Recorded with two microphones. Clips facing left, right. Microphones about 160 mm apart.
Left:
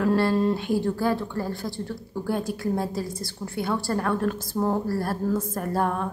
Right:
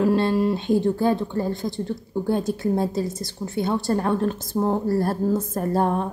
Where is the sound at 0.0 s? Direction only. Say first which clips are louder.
Right 2 dB; 20° right (ahead or behind).